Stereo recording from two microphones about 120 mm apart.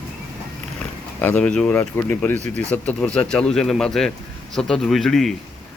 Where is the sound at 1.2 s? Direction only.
15° left (ahead or behind).